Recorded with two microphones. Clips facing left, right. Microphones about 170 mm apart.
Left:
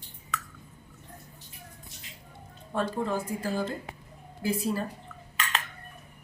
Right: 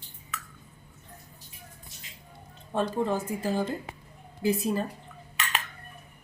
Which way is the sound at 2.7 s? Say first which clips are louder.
Right 2 dB; 20° right (ahead or behind).